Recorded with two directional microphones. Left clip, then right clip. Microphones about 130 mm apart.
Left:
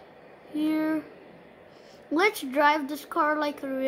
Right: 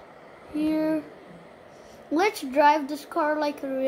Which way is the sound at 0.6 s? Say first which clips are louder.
Right 2 dB; 20° left (ahead or behind).